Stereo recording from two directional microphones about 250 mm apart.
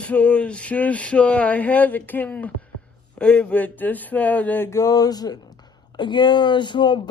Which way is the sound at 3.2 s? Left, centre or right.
Centre.